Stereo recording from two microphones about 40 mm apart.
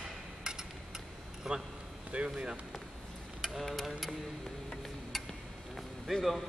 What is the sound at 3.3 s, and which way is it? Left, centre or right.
Speech, centre.